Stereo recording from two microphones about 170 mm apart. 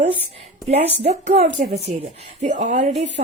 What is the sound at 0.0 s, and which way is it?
Speech, 35° right (ahead or behind).